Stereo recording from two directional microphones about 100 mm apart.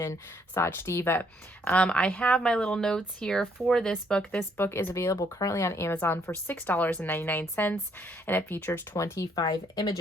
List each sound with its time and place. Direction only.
0.0 s speech: 30° left (ahead or behind); by 3.9 s 5° left (ahead or behind)
4.2 s a woman's voice: 15° left (ahead or behind)
9.5 s speech: 40° left (ahead or behind)